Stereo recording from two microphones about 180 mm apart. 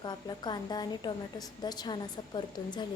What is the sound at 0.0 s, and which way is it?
A woman's voice, 25° left (ahead or behind).